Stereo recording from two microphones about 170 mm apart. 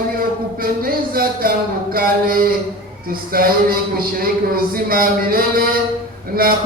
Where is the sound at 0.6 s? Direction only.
60° right (ahead or behind).